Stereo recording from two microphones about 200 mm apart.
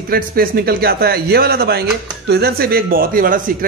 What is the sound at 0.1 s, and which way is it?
Speech, 50° right (ahead or behind).